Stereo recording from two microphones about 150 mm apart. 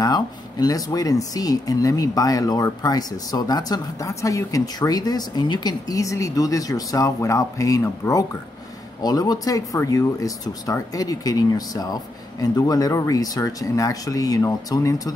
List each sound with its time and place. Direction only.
0.0 s speech: 25° left (ahead or behind)